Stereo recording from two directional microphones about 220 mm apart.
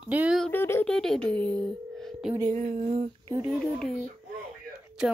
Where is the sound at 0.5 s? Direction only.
10° left (ahead or behind).